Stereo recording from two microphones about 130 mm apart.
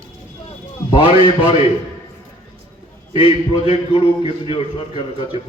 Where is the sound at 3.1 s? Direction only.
40° left (ahead or behind).